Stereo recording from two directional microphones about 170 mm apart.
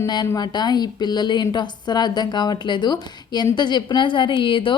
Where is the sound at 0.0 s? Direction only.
25° left (ahead or behind).